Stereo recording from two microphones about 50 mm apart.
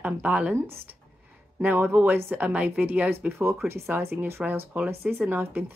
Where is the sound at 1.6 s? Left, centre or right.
Right.